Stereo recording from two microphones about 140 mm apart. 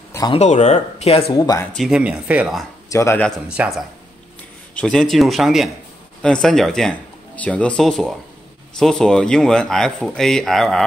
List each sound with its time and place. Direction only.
0.4 s speech: 55° left (ahead or behind)
1.3 s speech: 25° left (ahead or behind)
1.9 s speech: 10° right (ahead or behind)
2.9 s speech: 20° left (ahead or behind)
3.4 s speech: 5° right (ahead or behind)
4.7 s speech: 5° left (ahead or behind)